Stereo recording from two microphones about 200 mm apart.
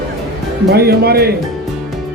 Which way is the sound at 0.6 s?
50° right (ahead or behind).